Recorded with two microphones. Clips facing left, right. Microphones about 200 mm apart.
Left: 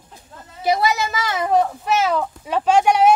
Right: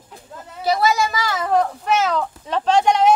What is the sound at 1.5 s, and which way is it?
Speech, 10° left (ahead or behind).